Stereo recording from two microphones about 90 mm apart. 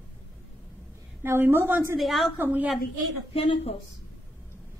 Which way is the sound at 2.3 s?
20° right (ahead or behind).